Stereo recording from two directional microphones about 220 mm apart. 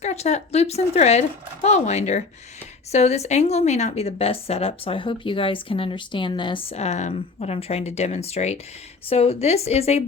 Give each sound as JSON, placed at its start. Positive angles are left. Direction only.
{"t": 0.0, "sound": "a woman's voice", "side_deg": 30}